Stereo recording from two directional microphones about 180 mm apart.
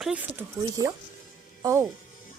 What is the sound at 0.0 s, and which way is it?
Speech, 10° right (ahead or behind).